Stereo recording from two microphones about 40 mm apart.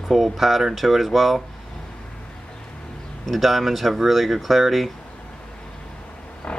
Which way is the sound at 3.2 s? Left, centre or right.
Centre.